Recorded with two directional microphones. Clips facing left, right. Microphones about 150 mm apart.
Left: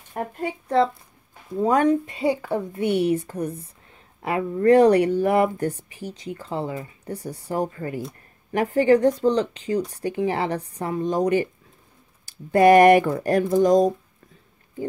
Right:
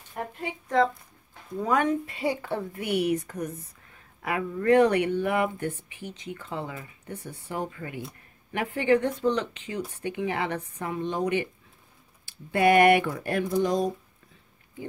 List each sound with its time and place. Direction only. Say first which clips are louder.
0.1 s a woman's voice: left 6 dB; 45° left (ahead or behind)
2.1 s speech: left 5 dB; 20° left (ahead or behind); by 13.9 s 45° left (ahead or behind)